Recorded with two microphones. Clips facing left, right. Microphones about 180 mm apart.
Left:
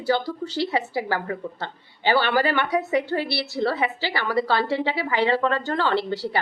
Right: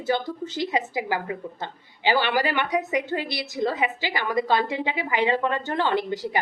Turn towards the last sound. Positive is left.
turn(degrees=-15)  # may be behind; listen again after turning